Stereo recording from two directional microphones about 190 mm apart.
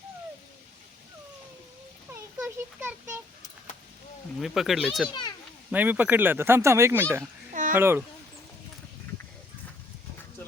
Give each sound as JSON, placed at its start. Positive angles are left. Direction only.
{"t": 2.1, "sound": "a sound", "side_deg": -10}
{"t": 4.4, "sound": "speech", "side_deg": 0}
{"t": 5.0, "sound": "a child's voice", "side_deg": 25}
{"t": 5.7, "sound": "speech", "side_deg": -10}
{"t": 7.5, "sound": "a sound", "side_deg": -40}
{"t": 7.8, "sound": "speech", "side_deg": -10}